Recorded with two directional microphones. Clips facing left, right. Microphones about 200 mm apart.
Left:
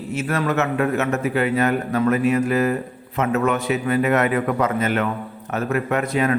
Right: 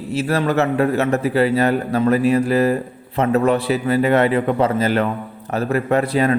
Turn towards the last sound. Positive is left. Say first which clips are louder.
# right 3 dB
turn(degrees=-35)  # may be behind; listen again after turning